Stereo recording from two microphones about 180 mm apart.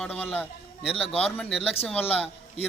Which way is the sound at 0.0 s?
10° left (ahead or behind).